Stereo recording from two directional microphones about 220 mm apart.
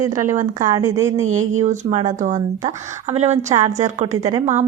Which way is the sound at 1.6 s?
30° right (ahead or behind).